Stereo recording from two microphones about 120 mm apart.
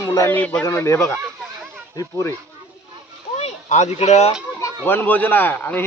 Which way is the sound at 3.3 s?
70° left (ahead or behind).